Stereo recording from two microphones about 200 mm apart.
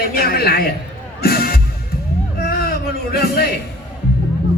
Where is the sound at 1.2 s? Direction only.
50° left (ahead or behind).